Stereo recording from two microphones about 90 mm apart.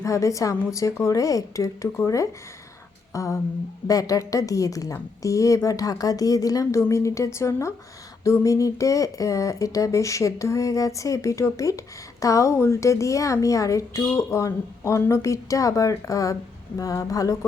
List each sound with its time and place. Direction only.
0.0 s a woman's voice: 35° left (ahead or behind)
3.1 s a sound: 35° left (ahead or behind)
3.8 s a woman's voice: 40° left (ahead or behind)